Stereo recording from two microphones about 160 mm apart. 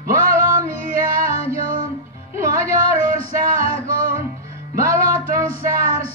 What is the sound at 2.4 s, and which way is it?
Music, 60° right (ahead or behind).